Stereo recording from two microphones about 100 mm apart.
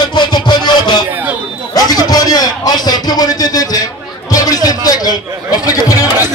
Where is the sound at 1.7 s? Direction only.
40° left (ahead or behind).